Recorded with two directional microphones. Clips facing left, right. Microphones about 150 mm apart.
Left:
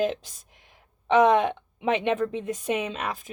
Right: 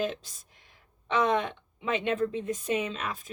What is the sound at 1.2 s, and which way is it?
A woman's voice, 65° left (ahead or behind).